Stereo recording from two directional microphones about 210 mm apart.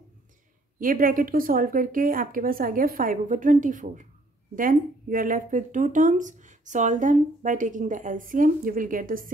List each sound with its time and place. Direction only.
0.7 s speech: 40° right (ahead or behind)